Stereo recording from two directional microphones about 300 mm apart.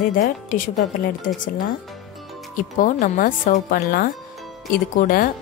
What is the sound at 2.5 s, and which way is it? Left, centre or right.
Speech, left.